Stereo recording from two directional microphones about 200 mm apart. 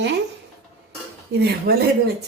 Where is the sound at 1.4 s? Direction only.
50° right (ahead or behind).